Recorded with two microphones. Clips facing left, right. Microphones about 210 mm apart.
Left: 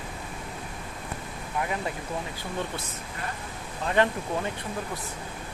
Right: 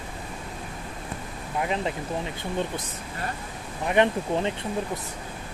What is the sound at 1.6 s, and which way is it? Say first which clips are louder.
Speech: right 4 dB; 20° right (ahead or behind).